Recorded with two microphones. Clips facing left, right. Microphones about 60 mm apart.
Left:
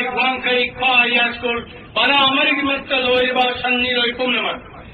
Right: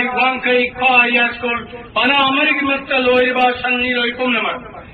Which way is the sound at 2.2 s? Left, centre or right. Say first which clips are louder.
Right 2 dB; right.